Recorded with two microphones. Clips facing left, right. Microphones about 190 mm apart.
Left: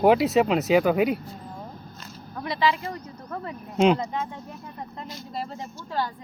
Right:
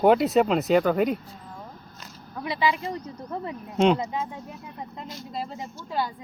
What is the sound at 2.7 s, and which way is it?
Speech, 20° right (ahead or behind).